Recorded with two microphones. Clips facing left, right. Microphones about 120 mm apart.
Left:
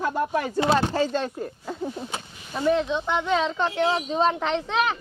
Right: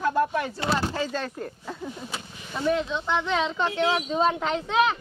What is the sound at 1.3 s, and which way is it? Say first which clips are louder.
Speech: left 2 dB; 10° left (ahead or behind).